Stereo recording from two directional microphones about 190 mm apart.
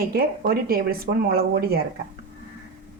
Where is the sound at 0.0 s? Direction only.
55° right (ahead or behind).